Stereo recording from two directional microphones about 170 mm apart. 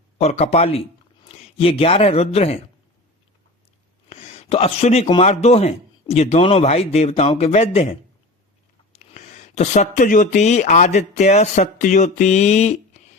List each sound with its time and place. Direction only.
0.2 s a man's voice: 40° left (ahead or behind)
4.1 s a sound: 40° left (ahead or behind)
5.2 s a man's voice: 40° left (ahead or behind)